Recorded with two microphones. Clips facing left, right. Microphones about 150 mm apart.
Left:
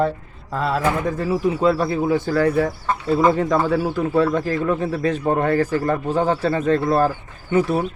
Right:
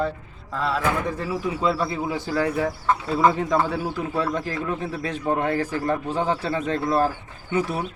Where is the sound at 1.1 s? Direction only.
50° left (ahead or behind).